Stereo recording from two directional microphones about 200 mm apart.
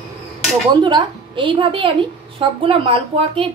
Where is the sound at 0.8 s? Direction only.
25° right (ahead or behind).